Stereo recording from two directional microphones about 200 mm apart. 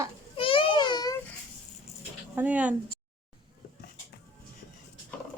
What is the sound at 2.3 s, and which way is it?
Speech, 5° right (ahead or behind).